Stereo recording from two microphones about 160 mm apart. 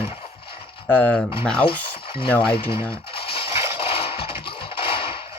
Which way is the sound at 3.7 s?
35° left (ahead or behind).